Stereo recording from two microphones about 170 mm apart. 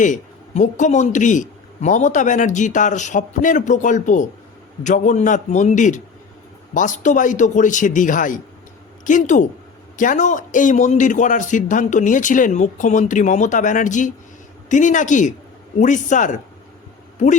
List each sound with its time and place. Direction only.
0.0 s a man's voice: 45° left (ahead or behind)